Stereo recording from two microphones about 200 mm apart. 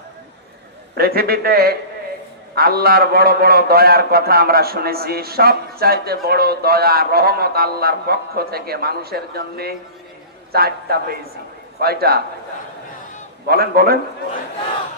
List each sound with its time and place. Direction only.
0.9 s a man's voice: 50° right (ahead or behind)
13.5 s a man's voice: 50° right (ahead or behind)